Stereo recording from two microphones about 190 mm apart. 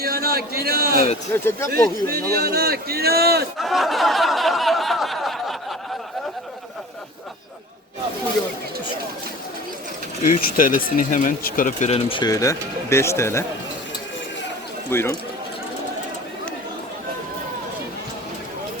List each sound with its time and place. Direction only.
0.0 s a sound: 55° right (ahead or behind)
1.3 s speech: 15° left (ahead or behind)
1.7 s a man's voice: 55° right (ahead or behind)
3.6 s a sound: centre (ahead or behind)
10.2 s speech: 45° left (ahead or behind); by 13.4 s 15° left (ahead or behind)
14.8 s speech: 15° left (ahead or behind)